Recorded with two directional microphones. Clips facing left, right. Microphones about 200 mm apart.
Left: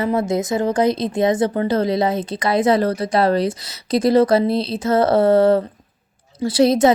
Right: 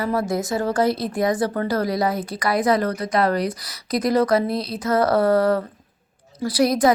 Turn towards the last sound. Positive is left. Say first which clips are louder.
# left 4 dB
turn(degrees=25)  # may be behind; listen again after turning